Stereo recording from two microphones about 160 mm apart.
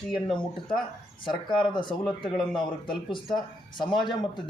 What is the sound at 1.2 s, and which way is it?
A man's voice, 30° left (ahead or behind).